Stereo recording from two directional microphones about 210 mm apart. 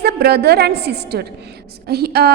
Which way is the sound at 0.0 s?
50° right (ahead or behind).